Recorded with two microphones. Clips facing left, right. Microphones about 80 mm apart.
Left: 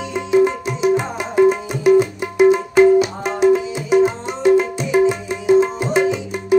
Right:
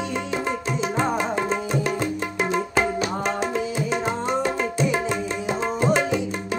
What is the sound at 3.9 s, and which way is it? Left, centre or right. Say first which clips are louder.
Music: left 11 dB; centre.